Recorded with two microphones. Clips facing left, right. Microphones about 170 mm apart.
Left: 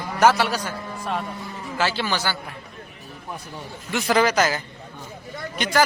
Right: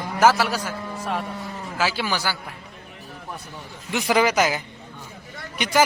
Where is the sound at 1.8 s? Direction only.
5° right (ahead or behind).